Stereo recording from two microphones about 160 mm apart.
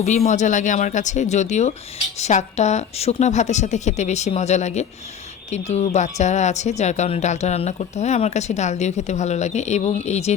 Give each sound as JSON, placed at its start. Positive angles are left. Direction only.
{"t": 0.3, "sound": "speech", "side_deg": 50}